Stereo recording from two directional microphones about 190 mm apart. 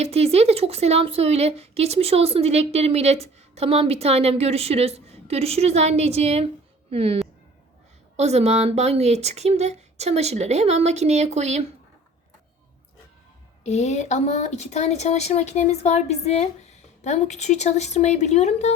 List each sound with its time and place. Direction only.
0.0 s speech: 30° right (ahead or behind)
13.7 s speech: 35° left (ahead or behind)